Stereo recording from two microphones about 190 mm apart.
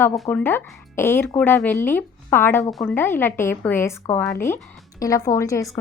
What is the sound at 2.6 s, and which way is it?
Speech, centre (ahead or behind).